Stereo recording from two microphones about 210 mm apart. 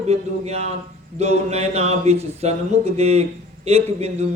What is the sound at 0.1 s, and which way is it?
Speech, 30° right (ahead or behind).